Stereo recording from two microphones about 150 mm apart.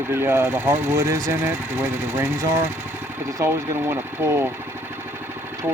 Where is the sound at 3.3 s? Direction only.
20° right (ahead or behind).